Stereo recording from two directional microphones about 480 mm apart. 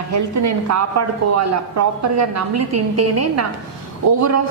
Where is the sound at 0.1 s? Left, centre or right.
Right.